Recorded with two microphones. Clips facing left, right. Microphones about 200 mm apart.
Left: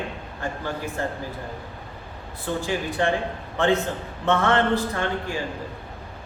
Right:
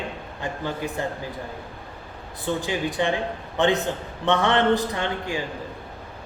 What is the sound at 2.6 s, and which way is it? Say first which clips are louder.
A man's voice: left 2 dB; 15° right (ahead or behind).